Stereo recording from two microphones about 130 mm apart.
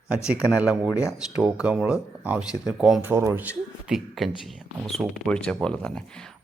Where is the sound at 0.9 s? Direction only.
25° left (ahead or behind).